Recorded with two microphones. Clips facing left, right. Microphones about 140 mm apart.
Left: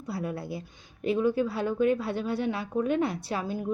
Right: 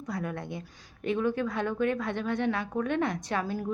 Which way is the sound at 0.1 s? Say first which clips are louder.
Left 2 dB; 30° left (ahead or behind).